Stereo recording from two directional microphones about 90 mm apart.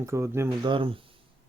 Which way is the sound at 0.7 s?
75° right (ahead or behind).